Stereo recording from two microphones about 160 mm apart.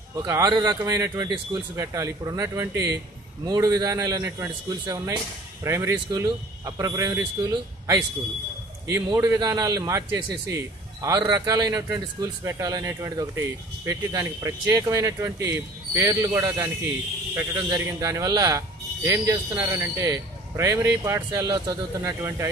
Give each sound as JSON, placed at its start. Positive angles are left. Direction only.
{"t": 0.3, "sound": "a man's voice", "side_deg": -20}